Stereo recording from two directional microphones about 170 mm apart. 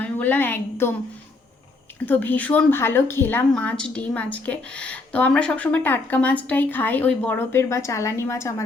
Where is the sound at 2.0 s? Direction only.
10° left (ahead or behind).